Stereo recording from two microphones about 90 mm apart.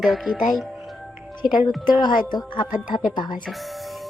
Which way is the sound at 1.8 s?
55° left (ahead or behind).